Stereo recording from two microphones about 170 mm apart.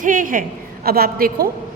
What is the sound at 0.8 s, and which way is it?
Speech, 65° right (ahead or behind).